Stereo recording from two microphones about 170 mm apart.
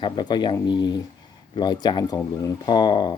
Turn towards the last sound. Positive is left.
turn(degrees=25)  # may be behind; listen again after turning